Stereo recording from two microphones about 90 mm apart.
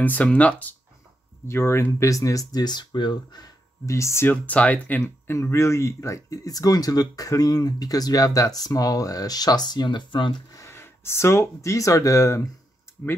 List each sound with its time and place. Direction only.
0.0 s speech: 15° left (ahead or behind)
1.5 s speech: 30° left (ahead or behind); by 3.4 s 60° left (ahead or behind)
3.8 s speech: 35° left (ahead or behind)
4.3 s speech: 15° left (ahead or behind); by 10.3 s 60° left (ahead or behind)
10.5 s speech: 30° left (ahead or behind)